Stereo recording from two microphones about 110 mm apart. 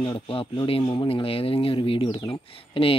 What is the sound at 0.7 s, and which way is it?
Speech, 50° left (ahead or behind).